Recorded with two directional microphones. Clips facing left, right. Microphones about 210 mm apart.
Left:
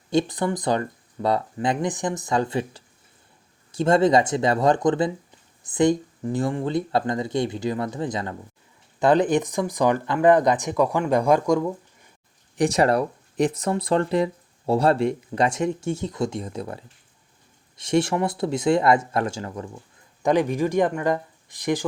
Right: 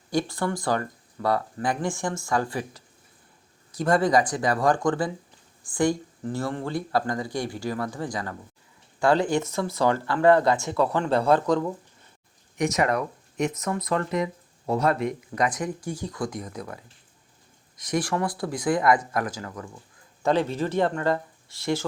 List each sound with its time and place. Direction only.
0.1 s speech: 20° left (ahead or behind)
12.5 s speech: 30° left (ahead or behind)
20.2 s speech: 15° left (ahead or behind)